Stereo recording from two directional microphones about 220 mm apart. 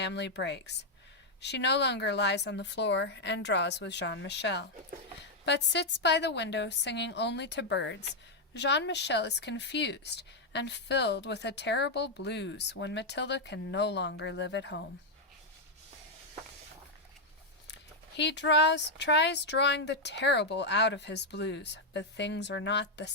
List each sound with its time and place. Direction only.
0.0 s speech: 50° left (ahead or behind)
18.2 s speech: 55° left (ahead or behind)